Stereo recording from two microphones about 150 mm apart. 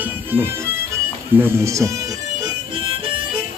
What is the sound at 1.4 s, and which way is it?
Speech, 20° right (ahead or behind).